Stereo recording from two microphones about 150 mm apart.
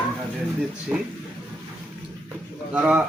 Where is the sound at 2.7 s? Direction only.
10° right (ahead or behind).